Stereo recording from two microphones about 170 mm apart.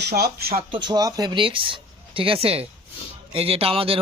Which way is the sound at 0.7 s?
25° right (ahead or behind).